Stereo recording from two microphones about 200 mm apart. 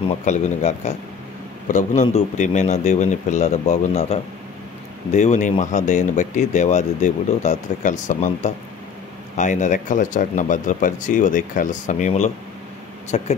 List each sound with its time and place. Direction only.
0.2 s speech: 35° left (ahead or behind)